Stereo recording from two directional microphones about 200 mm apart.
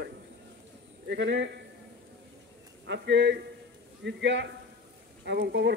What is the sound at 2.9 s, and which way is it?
Speech, 60° right (ahead or behind).